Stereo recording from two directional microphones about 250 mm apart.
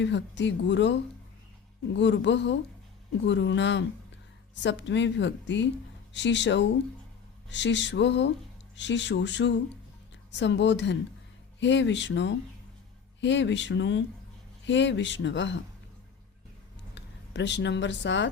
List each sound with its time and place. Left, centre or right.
0.0 s a woman's voice: left
16.9 s speech: left